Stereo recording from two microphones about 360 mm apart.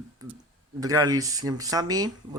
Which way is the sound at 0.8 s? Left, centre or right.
Centre.